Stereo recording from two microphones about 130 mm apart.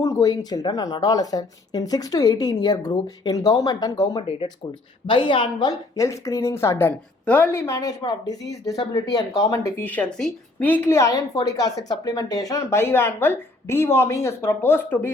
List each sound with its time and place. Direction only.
0.0 s speech: 25° left (ahead or behind)
5.0 s speech: 40° left (ahead or behind); by 10.9 s 15° left (ahead or behind)
11.4 s speech: 30° left (ahead or behind)